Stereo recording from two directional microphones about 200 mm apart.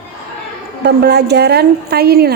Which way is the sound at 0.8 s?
55° right (ahead or behind).